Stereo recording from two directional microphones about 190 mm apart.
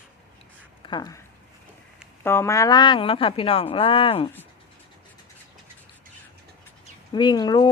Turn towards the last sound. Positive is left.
turn(degrees=20)  # may be behind; listen again after turning